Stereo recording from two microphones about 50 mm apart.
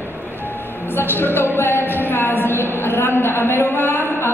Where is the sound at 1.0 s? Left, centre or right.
Left.